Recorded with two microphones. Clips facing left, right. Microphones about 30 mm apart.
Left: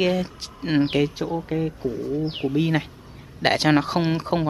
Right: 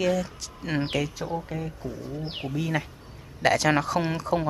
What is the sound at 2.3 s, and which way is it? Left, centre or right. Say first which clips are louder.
Speech: left 7 dB; centre.